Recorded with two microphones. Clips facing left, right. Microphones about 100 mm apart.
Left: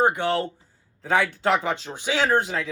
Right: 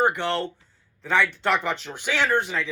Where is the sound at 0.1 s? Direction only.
10° left (ahead or behind).